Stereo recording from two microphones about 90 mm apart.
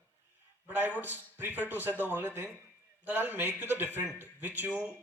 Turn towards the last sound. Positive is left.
turn(degrees=-20)  # may be behind; listen again after turning